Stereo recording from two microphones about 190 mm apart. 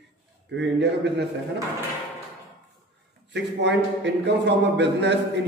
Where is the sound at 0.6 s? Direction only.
65° right (ahead or behind).